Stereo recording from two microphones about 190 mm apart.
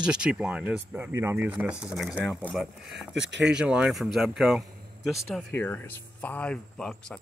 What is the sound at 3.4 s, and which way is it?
Speech, 5° right (ahead or behind).